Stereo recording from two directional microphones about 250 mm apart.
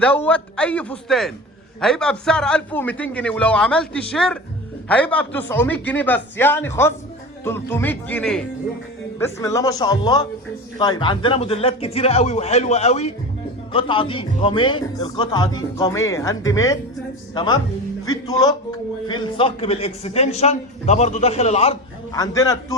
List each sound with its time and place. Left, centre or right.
0.0 s a man's voice: centre; by 21.8 s left
22.1 s speech: centre